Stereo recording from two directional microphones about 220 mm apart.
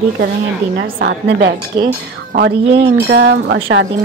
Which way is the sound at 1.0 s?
50° right (ahead or behind).